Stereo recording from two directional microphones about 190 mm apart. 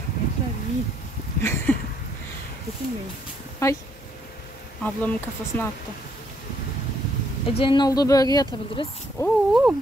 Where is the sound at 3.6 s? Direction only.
15° left (ahead or behind).